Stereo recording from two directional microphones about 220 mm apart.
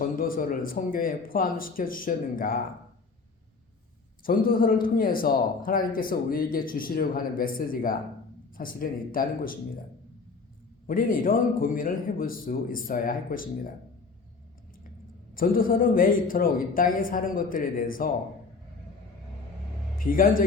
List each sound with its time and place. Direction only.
0.0 s speech: 40° left (ahead or behind)
4.2 s speech: 40° left (ahead or behind)
10.8 s speech: 40° left (ahead or behind)
15.4 s speech: 40° left (ahead or behind)
20.0 s speech: 40° left (ahead or behind)